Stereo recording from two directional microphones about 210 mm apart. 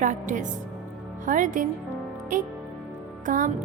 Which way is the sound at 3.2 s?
40° right (ahead or behind).